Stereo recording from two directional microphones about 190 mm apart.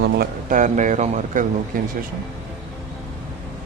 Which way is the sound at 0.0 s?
50° right (ahead or behind).